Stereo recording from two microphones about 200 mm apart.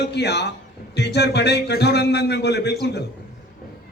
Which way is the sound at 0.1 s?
55° left (ahead or behind).